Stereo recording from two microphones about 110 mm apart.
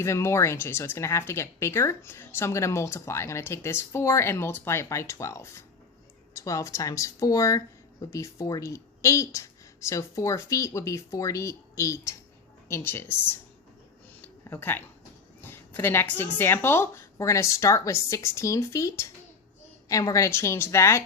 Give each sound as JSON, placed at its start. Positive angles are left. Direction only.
{"t": 0.0, "sound": "speech", "side_deg": 25}
{"t": 14.5, "sound": "speech", "side_deg": 20}